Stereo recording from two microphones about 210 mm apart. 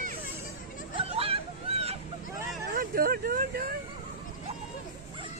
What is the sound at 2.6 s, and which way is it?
Vehicle, 45° right (ahead or behind).